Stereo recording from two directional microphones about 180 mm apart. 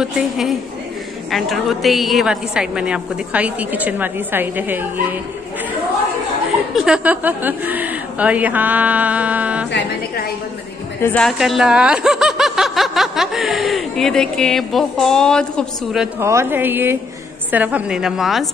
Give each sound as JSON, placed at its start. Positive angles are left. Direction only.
{"t": 0.0, "sound": "speech", "side_deg": 0}
{"t": 6.7, "sound": "a woman's voice", "side_deg": 0}
{"t": 9.7, "sound": "a woman's voice", "side_deg": 70}
{"t": 11.0, "sound": "a woman's voice", "side_deg": 10}
{"t": 11.2, "sound": "speech", "side_deg": 0}
{"t": 16.2, "sound": "a woman's voice", "side_deg": -15}